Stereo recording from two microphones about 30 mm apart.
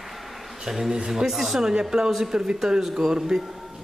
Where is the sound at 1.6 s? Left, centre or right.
Right.